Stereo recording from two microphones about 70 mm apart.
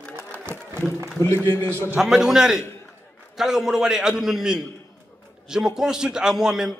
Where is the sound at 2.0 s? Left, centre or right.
Centre.